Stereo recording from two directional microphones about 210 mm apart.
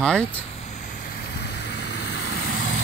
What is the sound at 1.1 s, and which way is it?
Vehicle, 50° left (ahead or behind).